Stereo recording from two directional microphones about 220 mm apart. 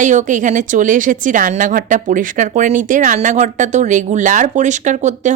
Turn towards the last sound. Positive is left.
turn(degrees=-35)  # may be behind; listen again after turning